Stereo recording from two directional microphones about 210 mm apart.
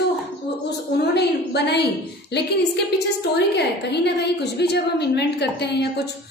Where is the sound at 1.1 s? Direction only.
50° left (ahead or behind).